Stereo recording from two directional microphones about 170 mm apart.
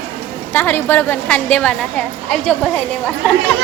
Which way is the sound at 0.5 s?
10° left (ahead or behind).